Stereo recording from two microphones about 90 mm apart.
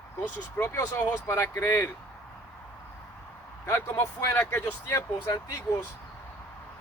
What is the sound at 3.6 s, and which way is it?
Speech, 25° left (ahead or behind).